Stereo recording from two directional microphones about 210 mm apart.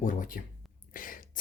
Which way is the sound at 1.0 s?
40° left (ahead or behind).